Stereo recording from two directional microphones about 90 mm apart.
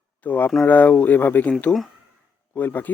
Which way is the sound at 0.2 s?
20° left (ahead or behind).